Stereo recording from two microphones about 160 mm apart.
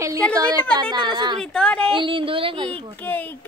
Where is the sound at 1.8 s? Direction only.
30° right (ahead or behind).